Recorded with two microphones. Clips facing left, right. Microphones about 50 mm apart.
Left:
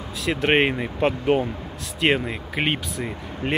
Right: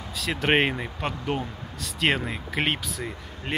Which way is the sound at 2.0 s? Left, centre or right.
Centre.